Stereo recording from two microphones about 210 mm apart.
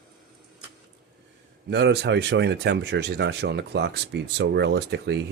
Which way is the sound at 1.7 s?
55° right (ahead or behind).